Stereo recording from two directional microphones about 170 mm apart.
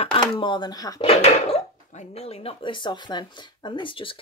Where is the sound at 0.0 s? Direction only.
30° left (ahead or behind).